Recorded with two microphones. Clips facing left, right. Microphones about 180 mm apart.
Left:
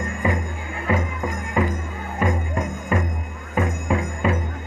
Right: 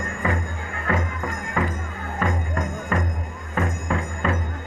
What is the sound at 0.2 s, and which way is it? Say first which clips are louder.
Music: left 2 dB; 15° left (ahead or behind).